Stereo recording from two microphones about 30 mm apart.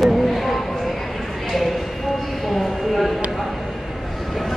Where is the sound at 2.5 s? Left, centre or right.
Centre.